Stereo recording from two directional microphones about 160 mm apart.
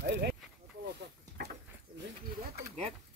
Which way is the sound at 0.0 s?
90° right.